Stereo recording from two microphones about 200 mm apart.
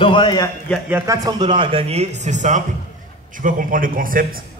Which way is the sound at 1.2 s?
20° right (ahead or behind).